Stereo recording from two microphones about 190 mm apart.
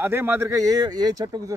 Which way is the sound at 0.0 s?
10° right (ahead or behind).